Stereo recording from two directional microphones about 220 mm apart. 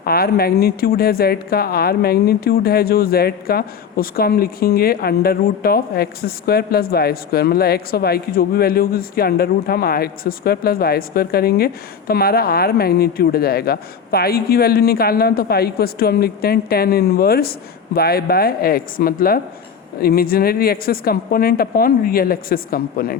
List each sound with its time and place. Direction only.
0.0 s a woman's voice: 45° left (ahead or behind)